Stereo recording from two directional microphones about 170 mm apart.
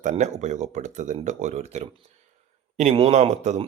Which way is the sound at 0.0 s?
45° right (ahead or behind).